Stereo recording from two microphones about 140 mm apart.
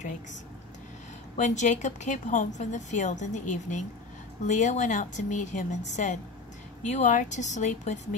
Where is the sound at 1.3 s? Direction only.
55° left (ahead or behind).